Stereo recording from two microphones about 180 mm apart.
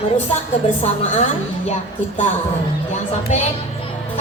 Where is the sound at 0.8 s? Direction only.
40° left (ahead or behind).